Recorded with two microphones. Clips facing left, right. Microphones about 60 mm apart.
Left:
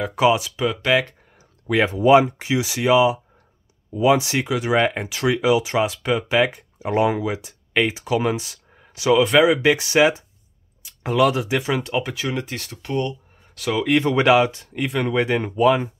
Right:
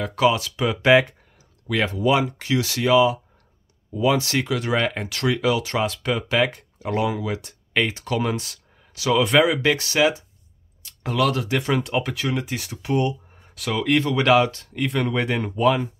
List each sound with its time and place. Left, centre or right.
0.0 s speech: centre
0.8 s speech: centre
1.7 s speech: left
2.4 s speech: centre
6.8 s speech: centre
7.2 s speech: centre
10.8 s a sound: centre
11.5 s speech: centre
13.6 s speech: centre
14.9 s speech: centre